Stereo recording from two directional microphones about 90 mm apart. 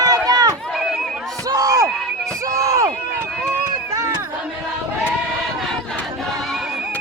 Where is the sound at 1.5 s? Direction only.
40° right (ahead or behind).